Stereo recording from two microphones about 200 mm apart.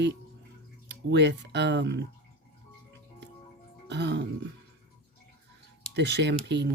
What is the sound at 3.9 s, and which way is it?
Speech, 60° right (ahead or behind).